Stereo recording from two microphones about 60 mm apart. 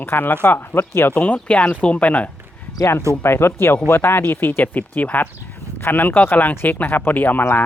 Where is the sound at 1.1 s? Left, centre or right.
Left.